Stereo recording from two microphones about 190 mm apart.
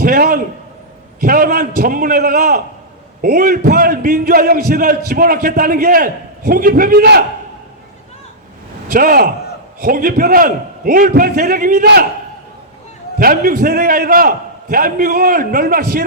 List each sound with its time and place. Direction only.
0.0 s a sound: 50° right (ahead or behind)
1.2 s a man's voice: 50° right (ahead or behind)
8.9 s a man's voice: 50° right (ahead or behind)
13.1 s a man's voice: 50° right (ahead or behind)